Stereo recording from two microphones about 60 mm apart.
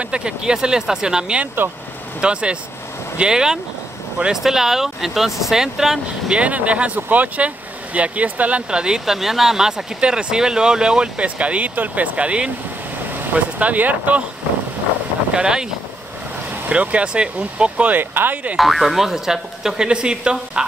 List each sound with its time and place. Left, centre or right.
0.0 s speech: centre
15.3 s speech: centre
16.6 s speech: right
18.6 s speech: centre